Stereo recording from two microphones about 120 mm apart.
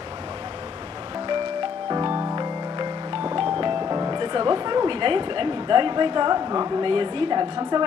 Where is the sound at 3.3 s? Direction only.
45° right (ahead or behind).